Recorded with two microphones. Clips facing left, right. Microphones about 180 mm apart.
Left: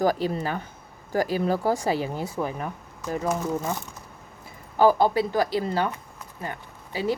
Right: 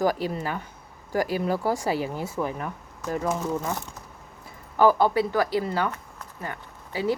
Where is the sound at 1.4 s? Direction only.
40° left (ahead or behind).